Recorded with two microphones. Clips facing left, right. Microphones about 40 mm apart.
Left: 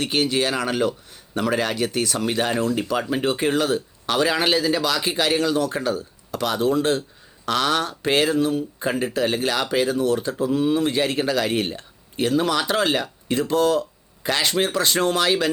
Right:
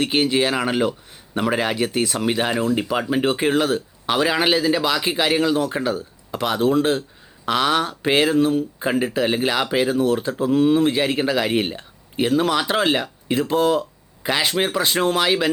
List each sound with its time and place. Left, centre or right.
0.0 s speech: right